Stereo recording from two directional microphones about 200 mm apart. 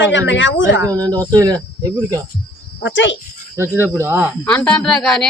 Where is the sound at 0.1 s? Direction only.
65° left (ahead or behind).